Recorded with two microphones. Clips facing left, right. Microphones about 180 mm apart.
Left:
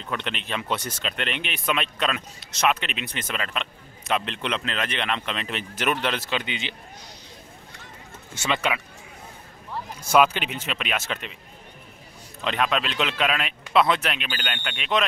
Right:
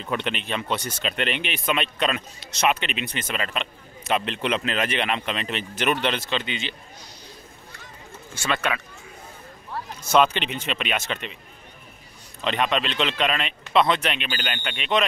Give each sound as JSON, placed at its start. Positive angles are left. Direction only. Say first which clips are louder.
{"t": 0.2, "sound": "speech", "louder": "right 3 dB", "side_deg": 0}
{"t": 6.4, "sound": "speech", "louder": "right 1 dB", "side_deg": 15}
{"t": 8.4, "sound": "speech", "louder": "even", "side_deg": 15}
{"t": 10.1, "sound": "speech", "louder": "even", "side_deg": 5}
{"t": 12.4, "sound": "speech", "louder": "right 1 dB", "side_deg": 0}